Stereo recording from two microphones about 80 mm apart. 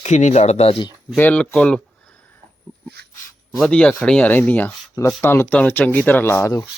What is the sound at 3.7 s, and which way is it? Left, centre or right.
Speech, centre.